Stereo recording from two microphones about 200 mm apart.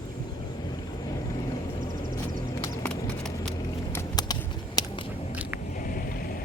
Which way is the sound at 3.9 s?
20° left (ahead or behind).